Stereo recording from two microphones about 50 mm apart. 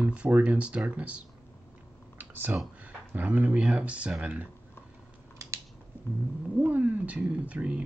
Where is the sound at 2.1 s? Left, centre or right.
Right.